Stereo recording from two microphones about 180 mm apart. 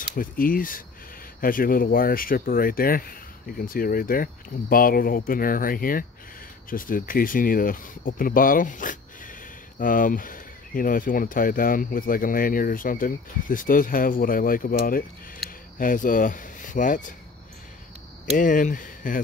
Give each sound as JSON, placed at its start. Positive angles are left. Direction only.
{"t": 0.1, "sound": "speech", "side_deg": 50}
{"t": 18.3, "sound": "speech", "side_deg": 45}